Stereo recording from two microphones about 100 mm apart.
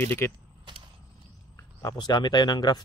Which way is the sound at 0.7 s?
50° right (ahead or behind).